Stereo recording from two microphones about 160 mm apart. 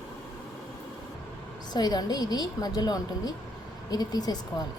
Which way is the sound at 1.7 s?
25° left (ahead or behind).